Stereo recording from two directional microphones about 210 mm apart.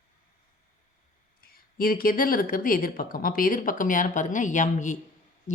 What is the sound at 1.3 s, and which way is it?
Speech, 45° left (ahead or behind).